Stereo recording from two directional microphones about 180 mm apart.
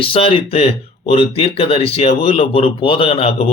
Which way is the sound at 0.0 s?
30° left (ahead or behind).